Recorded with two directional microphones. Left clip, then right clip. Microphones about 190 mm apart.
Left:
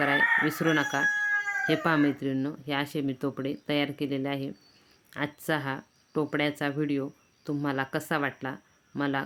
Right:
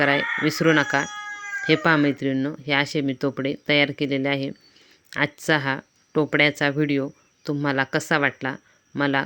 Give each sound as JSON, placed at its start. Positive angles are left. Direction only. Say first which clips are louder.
{"t": 0.0, "sound": "speech", "louder": "right 3 dB", "side_deg": -30}